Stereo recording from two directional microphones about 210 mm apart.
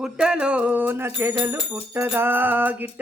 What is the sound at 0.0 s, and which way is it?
Bicycle bell, 5° right (ahead or behind).